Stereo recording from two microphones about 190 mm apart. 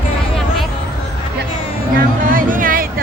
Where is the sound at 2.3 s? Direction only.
45° right (ahead or behind).